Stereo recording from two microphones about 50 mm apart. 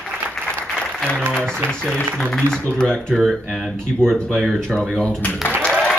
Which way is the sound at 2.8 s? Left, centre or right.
Centre.